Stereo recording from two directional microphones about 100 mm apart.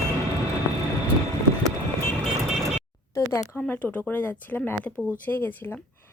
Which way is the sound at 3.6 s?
10° left (ahead or behind).